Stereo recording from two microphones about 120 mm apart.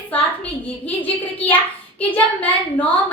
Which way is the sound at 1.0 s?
15° left (ahead or behind).